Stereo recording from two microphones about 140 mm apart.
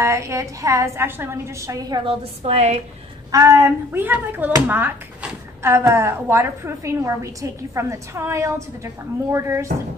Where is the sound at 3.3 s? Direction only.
20° right (ahead or behind).